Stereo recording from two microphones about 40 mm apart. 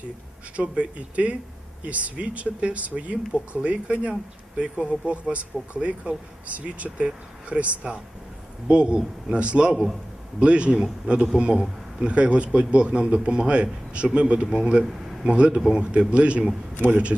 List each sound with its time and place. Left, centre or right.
0.5 s speech: right
9.7 s a man's voice: centre
10.4 s speech: right
10.8 s speech: centre
11.3 s speech: right
16.7 s a man's voice: right